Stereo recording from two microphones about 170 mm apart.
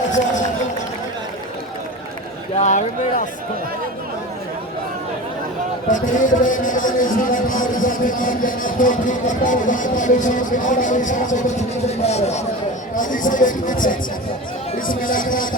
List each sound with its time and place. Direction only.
2.6 s a man's voice: 45° left (ahead or behind)
5.9 s a man's voice: 50° left (ahead or behind)
13.0 s a man's voice: 50° left (ahead or behind)